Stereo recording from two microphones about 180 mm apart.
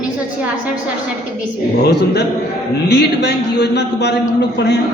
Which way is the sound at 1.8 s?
70° left (ahead or behind).